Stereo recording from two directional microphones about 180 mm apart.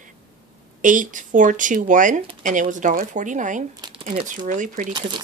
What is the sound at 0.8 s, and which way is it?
Speech, 45° right (ahead or behind).